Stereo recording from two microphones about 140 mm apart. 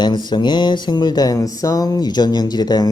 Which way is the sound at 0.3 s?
30° left (ahead or behind).